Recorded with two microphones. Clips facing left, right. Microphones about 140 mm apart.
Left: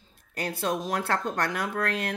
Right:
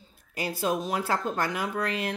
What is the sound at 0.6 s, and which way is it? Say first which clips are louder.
Speech: right 1 dB; 5° right (ahead or behind).